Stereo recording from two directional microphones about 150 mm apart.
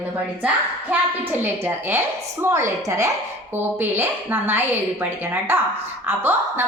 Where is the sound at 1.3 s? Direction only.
15° right (ahead or behind).